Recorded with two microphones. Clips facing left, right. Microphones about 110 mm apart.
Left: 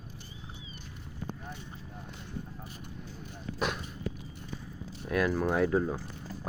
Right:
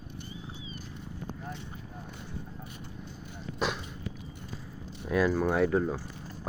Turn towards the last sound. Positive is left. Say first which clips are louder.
# right 1 dB
turn(degrees=5)  # may be behind; listen again after turning